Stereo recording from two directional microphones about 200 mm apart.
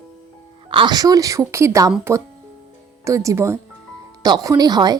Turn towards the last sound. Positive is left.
turn(degrees=-20)  # may be behind; listen again after turning